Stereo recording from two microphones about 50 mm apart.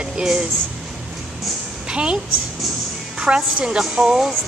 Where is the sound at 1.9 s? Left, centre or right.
Centre.